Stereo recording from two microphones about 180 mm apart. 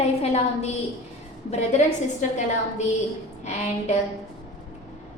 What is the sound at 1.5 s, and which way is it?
Speech, 40° left (ahead or behind).